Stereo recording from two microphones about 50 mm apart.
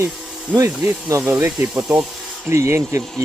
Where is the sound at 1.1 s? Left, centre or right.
Right.